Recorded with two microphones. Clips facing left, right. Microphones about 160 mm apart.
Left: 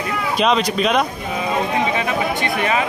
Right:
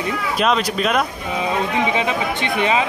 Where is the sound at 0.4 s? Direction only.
Centre (ahead or behind).